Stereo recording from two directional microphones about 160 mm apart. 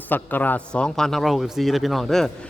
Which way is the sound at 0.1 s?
10° left (ahead or behind).